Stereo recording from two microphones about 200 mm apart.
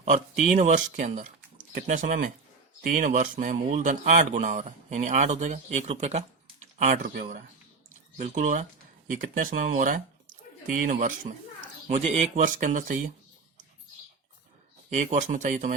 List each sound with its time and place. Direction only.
0.0 s speech: 40° right (ahead or behind)
8.2 s speech: 40° right (ahead or behind)
14.8 s speech: 35° right (ahead or behind)